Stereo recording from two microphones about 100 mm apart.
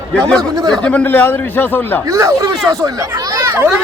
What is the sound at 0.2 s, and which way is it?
Speech, 5° left (ahead or behind).